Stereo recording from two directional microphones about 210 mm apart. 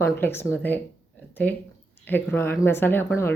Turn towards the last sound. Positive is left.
turn(degrees=10)  # may be behind; listen again after turning